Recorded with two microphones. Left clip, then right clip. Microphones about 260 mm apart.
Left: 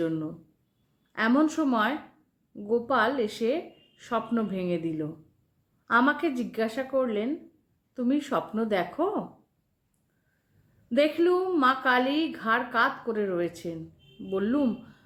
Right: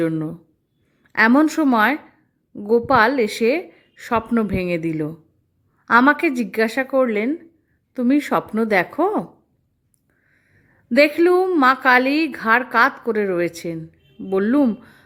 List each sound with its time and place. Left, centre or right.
1.1 s a woman's voice: right
10.8 s a woman's voice: right